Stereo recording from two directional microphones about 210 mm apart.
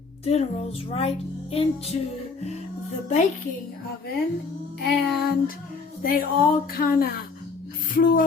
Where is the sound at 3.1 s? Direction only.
35° left (ahead or behind).